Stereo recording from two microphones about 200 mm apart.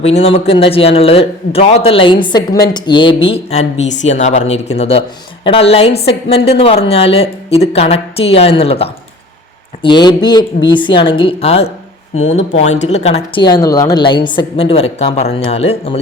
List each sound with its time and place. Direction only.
0.0 s a man's voice: 30° left (ahead or behind)